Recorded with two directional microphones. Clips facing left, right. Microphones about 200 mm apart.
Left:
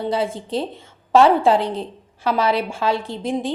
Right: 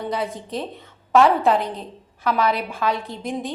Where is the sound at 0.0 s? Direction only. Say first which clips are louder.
Left 4 dB; 30° left (ahead or behind).